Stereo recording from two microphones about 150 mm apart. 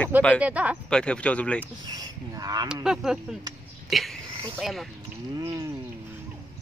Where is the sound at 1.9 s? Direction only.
25° right (ahead or behind).